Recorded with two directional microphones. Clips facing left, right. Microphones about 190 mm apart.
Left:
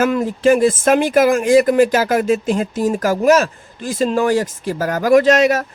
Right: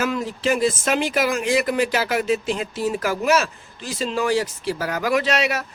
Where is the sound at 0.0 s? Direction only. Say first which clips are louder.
Left 8 dB; 50° left (ahead or behind).